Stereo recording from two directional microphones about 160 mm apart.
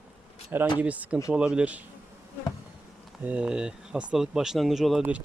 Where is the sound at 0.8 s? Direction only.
10° right (ahead or behind).